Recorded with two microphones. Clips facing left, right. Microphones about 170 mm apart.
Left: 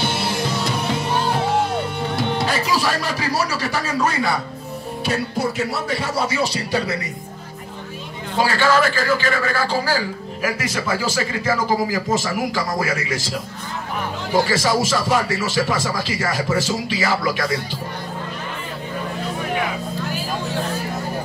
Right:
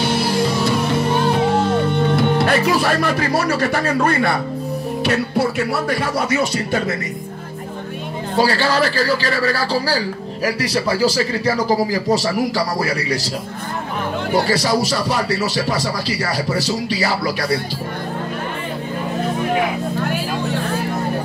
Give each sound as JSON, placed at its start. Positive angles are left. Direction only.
{"t": 2.1, "sound": "speech", "side_deg": -60}
{"t": 8.4, "sound": "speech", "side_deg": -35}
{"t": 14.4, "sound": "speech", "side_deg": -40}